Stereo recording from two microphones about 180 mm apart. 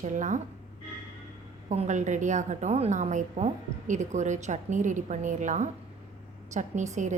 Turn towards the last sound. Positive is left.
turn(degrees=-40)  # may be behind; listen again after turning